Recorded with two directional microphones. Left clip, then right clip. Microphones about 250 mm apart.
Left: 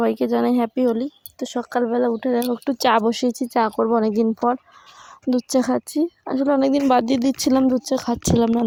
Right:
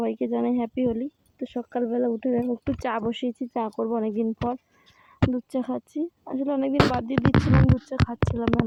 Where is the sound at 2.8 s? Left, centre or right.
Left.